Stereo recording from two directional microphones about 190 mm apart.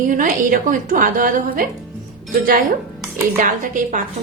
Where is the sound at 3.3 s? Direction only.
45° right (ahead or behind).